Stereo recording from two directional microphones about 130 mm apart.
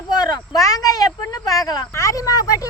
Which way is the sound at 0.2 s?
30° left (ahead or behind).